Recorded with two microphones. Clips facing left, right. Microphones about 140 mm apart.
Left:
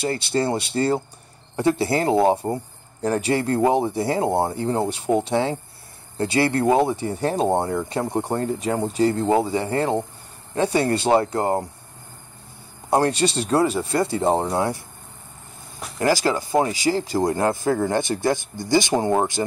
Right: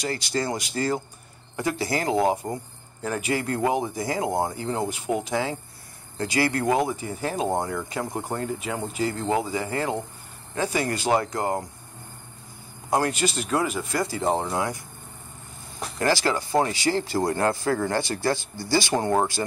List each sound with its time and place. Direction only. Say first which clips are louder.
0.0 s speech: left 5 dB; 25° left (ahead or behind)
12.9 s speech: left 4 dB; 35° left (ahead or behind)
16.0 s speech: left 3 dB; 20° left (ahead or behind)